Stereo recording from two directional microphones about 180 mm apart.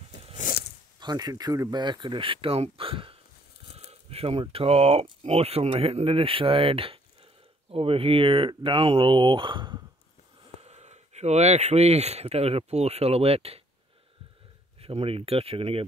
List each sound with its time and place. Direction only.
0.4 s a sound: 55° left (ahead or behind)
0.9 s speech: 20° right (ahead or behind)
10.6 s speech: 40° right (ahead or behind)
14.8 s speech: 35° right (ahead or behind)